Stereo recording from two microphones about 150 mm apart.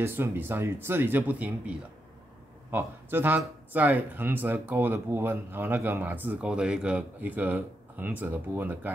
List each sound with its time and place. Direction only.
0.0 s speech: 15° right (ahead or behind)